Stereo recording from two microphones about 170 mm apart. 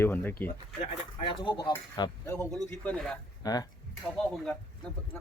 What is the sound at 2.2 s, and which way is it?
Speech, 15° left (ahead or behind).